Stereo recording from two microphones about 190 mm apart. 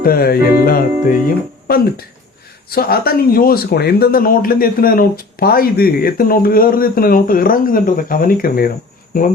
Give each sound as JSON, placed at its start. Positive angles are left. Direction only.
{"t": 0.0, "sound": "speech", "side_deg": 50}